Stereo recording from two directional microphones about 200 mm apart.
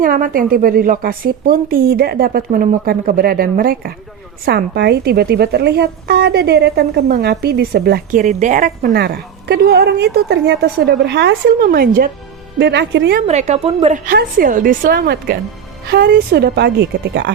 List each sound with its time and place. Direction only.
0.0 s a woman's voice: 45° right (ahead or behind)
8.2 s a woman's voice: 35° right (ahead or behind)
12.5 s a woman's voice: 60° right (ahead or behind)
13.2 s a woman's voice: 35° right (ahead or behind); by 17.3 s 60° right (ahead or behind)